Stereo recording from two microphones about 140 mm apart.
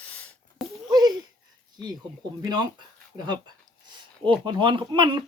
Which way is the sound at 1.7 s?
30° right (ahead or behind).